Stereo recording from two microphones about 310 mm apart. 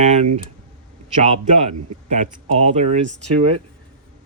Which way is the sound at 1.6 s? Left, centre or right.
Right.